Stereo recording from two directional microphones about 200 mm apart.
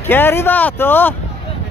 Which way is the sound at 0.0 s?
10° left (ahead or behind).